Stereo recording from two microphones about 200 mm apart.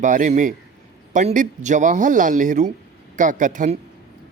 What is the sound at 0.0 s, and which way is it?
Speech, 40° right (ahead or behind).